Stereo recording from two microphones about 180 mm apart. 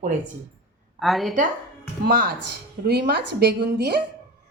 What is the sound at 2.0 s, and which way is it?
Speech, 50° right (ahead or behind).